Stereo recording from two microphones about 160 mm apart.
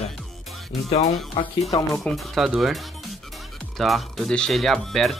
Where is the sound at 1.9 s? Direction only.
Centre (ahead or behind).